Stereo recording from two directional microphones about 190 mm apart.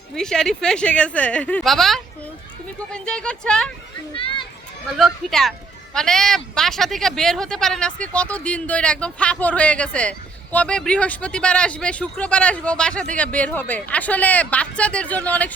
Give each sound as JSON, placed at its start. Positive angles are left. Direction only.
{"t": 0.1, "sound": "speech", "side_deg": 5}
{"t": 4.1, "sound": "a child's voice", "side_deg": 25}
{"t": 4.9, "sound": "speech", "side_deg": 0}